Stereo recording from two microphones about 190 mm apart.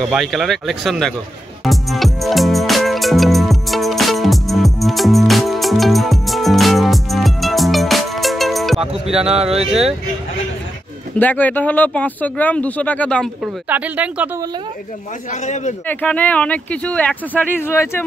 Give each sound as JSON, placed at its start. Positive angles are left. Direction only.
{"t": 0.1, "sound": "speech", "side_deg": 0}
{"t": 1.6, "sound": "music", "side_deg": 0}
{"t": 9.2, "sound": "speech", "side_deg": -30}
{"t": 11.1, "sound": "speech", "side_deg": 10}
{"t": 13.4, "sound": "speech", "side_deg": -10}
{"t": 15.4, "sound": "a man's voice", "side_deg": 40}
{"t": 15.9, "sound": "speech", "side_deg": 10}